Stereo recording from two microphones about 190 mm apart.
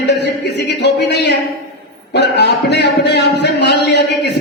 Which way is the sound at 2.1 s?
60° left (ahead or behind).